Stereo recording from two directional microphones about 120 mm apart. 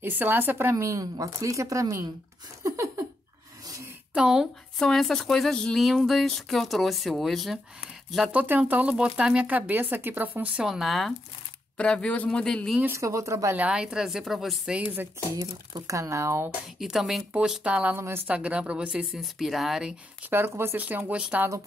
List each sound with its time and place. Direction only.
0.0 s a woman's voice: 15° right (ahead or behind)
2.6 s a sound: 25° right (ahead or behind)
4.1 s a man's voice: 5° right (ahead or behind)
12.8 s a woman's voice: 25° right (ahead or behind)
13.6 s speech: 5° right (ahead or behind)
15.3 s a woman's voice: 30° right (ahead or behind)
16.8 s speech: centre (ahead or behind)
17.9 s a woman's voice: 20° right (ahead or behind)
18.2 s speech: 10° right (ahead or behind)
20.2 s speech: 20° right (ahead or behind)